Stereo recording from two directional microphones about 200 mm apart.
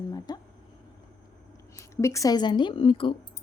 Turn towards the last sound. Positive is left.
turn(degrees=25)  # may be behind; listen again after turning